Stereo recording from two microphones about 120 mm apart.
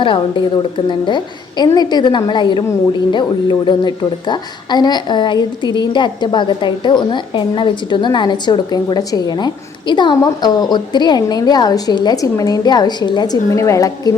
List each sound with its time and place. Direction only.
0.0 s a woman's voice: 45° left (ahead or behind)
3.7 s a woman's voice: 35° left (ahead or behind)